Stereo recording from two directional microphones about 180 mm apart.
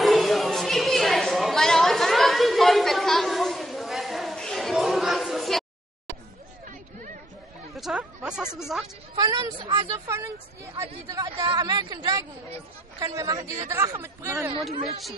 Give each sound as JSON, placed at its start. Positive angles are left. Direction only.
{"t": 0.0, "sound": "chatter", "side_deg": 0}
{"t": 7.7, "sound": "chatter", "side_deg": 0}
{"t": 8.5, "sound": "speech", "side_deg": 0}
{"t": 9.1, "sound": "a woman's voice", "side_deg": -20}
{"t": 11.2, "sound": "a woman's voice", "side_deg": -25}